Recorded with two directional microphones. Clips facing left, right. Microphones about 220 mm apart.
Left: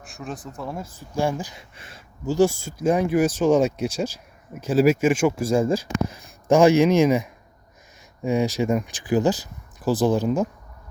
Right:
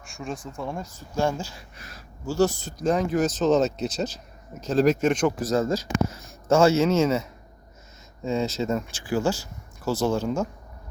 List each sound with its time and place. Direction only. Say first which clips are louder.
0.0 s speech: even; centre (ahead or behind)
0.9 s speech: left 1 dB; 15° left (ahead or behind)
1.7 s speech: right 1 dB; 30° left (ahead or behind)